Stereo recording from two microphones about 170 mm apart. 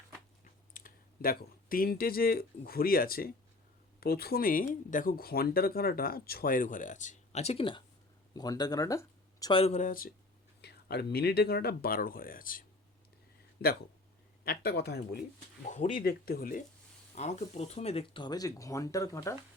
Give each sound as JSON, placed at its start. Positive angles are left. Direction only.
{"t": 0.4, "sound": "speech", "side_deg": 55}
{"t": 8.3, "sound": "speech", "side_deg": 20}
{"t": 9.5, "sound": "speech", "side_deg": 35}
{"t": 10.6, "sound": "speech", "side_deg": 70}
{"t": 14.4, "sound": "speech", "side_deg": 65}
{"t": 15.6, "sound": "speech", "side_deg": 50}
{"t": 16.0, "sound": "speech", "side_deg": 60}
{"t": 17.2, "sound": "speech", "side_deg": 40}